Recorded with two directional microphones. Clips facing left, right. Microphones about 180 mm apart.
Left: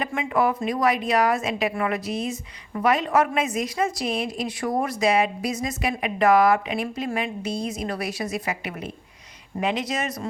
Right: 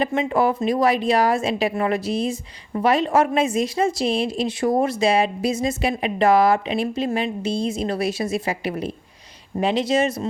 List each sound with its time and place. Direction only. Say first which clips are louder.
0.0 s a woman's voice: right 4 dB; 25° right (ahead or behind)